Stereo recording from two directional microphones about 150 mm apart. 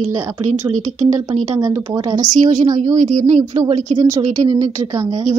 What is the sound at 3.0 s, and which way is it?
Speech, 55° right (ahead or behind).